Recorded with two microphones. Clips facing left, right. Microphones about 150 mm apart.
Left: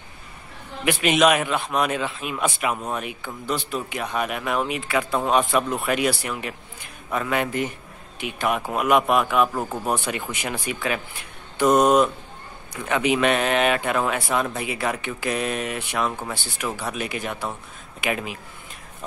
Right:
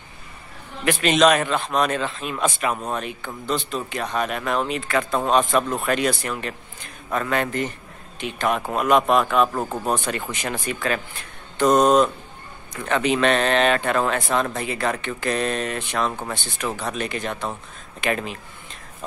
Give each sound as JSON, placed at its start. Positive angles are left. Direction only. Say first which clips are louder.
{"t": 0.8, "sound": "a man's voice", "louder": "right 1 dB", "side_deg": 10}